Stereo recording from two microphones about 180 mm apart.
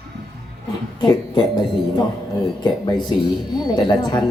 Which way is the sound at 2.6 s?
25° left (ahead or behind).